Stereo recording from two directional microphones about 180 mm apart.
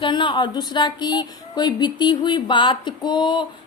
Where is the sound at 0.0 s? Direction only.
25° left (ahead or behind).